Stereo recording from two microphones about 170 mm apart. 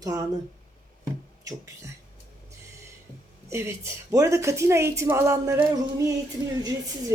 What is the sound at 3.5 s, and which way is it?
A woman's voice, 15° right (ahead or behind).